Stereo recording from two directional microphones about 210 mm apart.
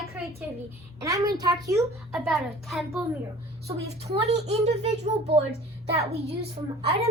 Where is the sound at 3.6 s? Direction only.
30° right (ahead or behind).